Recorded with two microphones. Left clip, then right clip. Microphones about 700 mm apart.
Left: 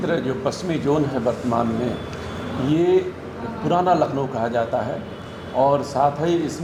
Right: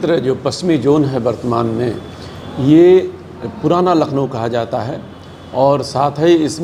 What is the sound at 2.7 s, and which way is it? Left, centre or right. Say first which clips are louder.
Speech: right 10 dB; right.